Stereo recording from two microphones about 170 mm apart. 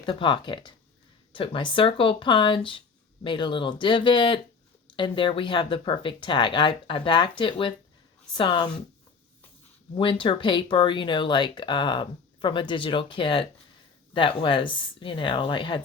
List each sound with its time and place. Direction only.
0.0 s speech: 30° left (ahead or behind)
9.9 s speech: 30° left (ahead or behind)